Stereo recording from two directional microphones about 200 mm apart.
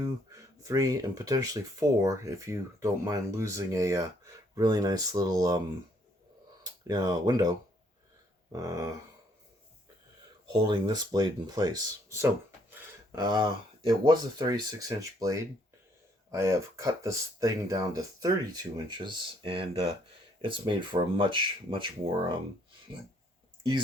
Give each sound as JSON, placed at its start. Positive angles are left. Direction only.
{"t": 0.0, "sound": "speech", "side_deg": -15}
{"t": 8.5, "sound": "speech", "side_deg": -15}
{"t": 10.5, "sound": "speech", "side_deg": -20}